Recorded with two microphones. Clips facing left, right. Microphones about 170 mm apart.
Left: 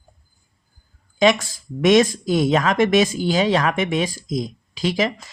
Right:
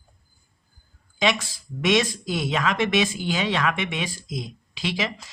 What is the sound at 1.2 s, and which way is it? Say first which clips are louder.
Speech: left 7 dB; 45° left (ahead or behind).